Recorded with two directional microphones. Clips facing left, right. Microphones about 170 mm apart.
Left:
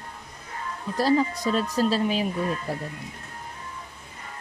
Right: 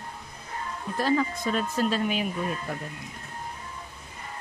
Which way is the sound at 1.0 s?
35° left (ahead or behind).